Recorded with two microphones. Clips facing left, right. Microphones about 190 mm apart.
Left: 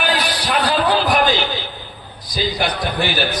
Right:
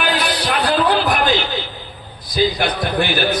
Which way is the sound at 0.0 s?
55° right (ahead or behind).